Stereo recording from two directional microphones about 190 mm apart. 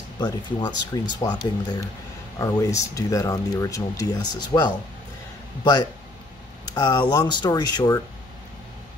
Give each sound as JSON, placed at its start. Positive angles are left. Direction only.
{"t": 0.2, "sound": "speech", "side_deg": 20}
{"t": 2.3, "sound": "speech", "side_deg": 15}